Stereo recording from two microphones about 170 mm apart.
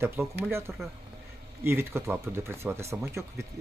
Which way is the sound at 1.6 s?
15° right (ahead or behind).